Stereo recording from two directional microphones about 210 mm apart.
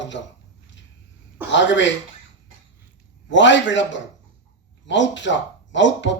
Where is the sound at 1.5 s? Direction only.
60° left (ahead or behind).